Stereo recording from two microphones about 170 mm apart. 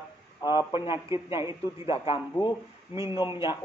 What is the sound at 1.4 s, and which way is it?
A man's voice, 35° left (ahead or behind).